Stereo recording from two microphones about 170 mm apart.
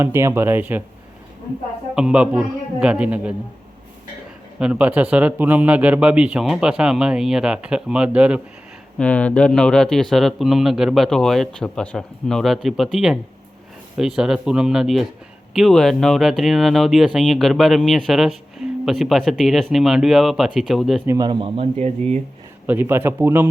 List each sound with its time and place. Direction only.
0.0 s a man's voice: 15° right (ahead or behind)
2.0 s speech: 5° right (ahead or behind)
4.6 s a man's voice: 5° right (ahead or behind)
9.0 s speech: 5° left (ahead or behind)
21.1 s speech: 25° right (ahead or behind)
22.6 s a man's voice: 10° right (ahead or behind)